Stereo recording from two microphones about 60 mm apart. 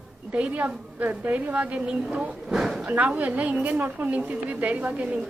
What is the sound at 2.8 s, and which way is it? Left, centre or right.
A woman's voice, right.